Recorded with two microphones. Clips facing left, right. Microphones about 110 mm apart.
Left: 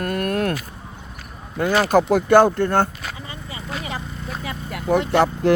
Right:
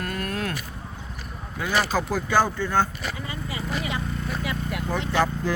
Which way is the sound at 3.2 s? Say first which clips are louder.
Right 2 dB; 30° left (ahead or behind).